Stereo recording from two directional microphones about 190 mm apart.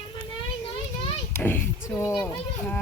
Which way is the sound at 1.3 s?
10° left (ahead or behind).